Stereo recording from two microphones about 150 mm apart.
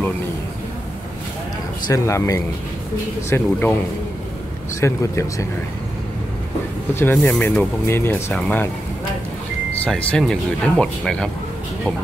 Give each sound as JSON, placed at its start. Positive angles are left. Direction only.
{"t": 1.9, "sound": "speech", "side_deg": 20}
{"t": 4.7, "sound": "speech", "side_deg": 20}
{"t": 7.2, "sound": "speech", "side_deg": 5}
{"t": 7.4, "sound": "speech", "side_deg": 15}
{"t": 9.8, "sound": "speech", "side_deg": 5}